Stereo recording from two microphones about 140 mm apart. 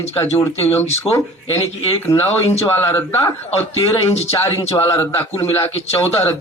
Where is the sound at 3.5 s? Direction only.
45° left (ahead or behind).